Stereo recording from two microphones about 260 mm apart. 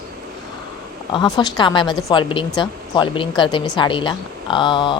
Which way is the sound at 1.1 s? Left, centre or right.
Centre.